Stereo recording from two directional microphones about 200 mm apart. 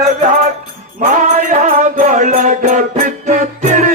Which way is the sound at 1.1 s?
40° right (ahead or behind).